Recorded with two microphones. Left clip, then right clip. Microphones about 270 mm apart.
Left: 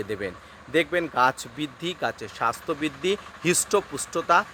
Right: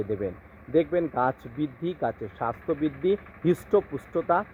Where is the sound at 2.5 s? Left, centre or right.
Left.